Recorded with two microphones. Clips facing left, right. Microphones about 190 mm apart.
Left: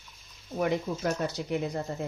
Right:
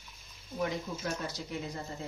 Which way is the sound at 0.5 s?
60° left (ahead or behind).